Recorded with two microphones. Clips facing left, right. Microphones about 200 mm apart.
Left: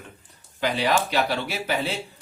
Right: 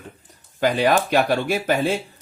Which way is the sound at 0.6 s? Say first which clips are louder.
Right 5 dB; 50° right (ahead or behind).